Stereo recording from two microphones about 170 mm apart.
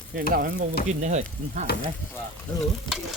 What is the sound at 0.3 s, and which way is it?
Speech, 65° right (ahead or behind).